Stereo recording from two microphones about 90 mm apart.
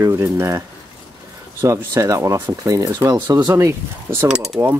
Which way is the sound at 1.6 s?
35° right (ahead or behind).